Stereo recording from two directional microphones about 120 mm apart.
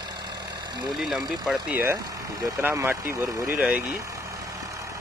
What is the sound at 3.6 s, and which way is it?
Speech, 10° right (ahead or behind).